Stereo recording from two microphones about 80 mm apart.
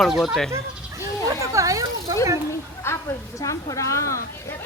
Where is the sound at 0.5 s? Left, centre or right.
Right.